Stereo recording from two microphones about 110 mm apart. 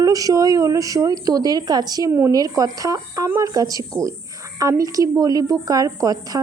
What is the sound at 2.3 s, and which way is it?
A woman's voice, 35° right (ahead or behind).